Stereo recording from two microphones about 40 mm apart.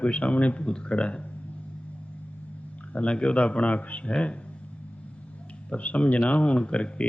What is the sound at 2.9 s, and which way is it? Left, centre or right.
Speech, left.